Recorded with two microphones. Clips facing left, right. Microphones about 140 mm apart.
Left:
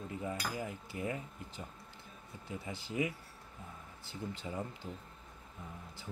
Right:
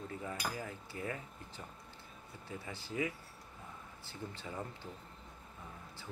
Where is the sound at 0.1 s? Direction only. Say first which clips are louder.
Left 5 dB; 20° left (ahead or behind).